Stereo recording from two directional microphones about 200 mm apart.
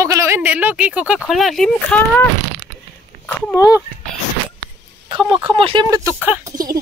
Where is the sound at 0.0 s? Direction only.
15° right (ahead or behind); by 2.2 s 5° left (ahead or behind).